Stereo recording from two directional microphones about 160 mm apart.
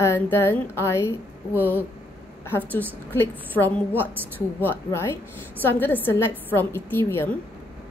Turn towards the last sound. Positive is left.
turn(degrees=15)  # may be behind; listen again after turning